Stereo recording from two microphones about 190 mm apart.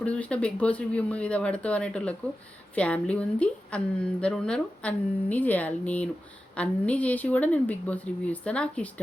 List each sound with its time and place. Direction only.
0.0 s a woman's voice: 5° left (ahead or behind)